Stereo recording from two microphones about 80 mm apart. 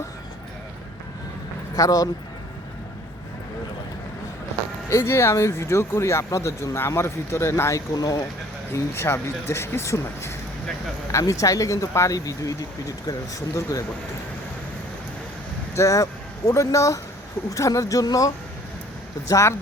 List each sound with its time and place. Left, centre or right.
1.7 s speech: left
4.9 s speech: left
7.9 s speech: left
8.7 s speech: left
13.6 s speech: left
15.7 s speech: left
19.3 s speech: left